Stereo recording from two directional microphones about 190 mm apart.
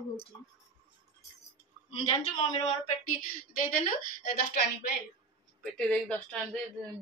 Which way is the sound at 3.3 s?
45° left (ahead or behind).